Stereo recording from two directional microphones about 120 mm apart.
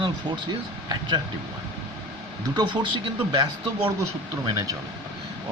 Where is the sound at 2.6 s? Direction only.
40° right (ahead or behind).